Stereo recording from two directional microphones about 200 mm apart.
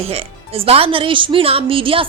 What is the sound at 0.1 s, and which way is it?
Speech, 30° right (ahead or behind).